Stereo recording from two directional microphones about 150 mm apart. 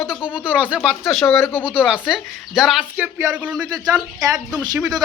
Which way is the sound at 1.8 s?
5° right (ahead or behind).